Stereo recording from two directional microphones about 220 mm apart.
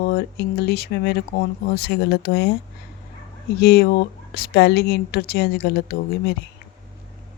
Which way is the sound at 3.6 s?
45° left (ahead or behind).